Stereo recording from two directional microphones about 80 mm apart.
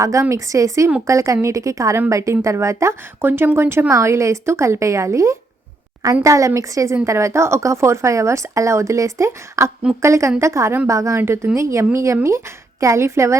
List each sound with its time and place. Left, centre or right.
0.0 s speech: right
3.2 s speech: right
11.2 s a woman's voice: right
11.5 s speech: right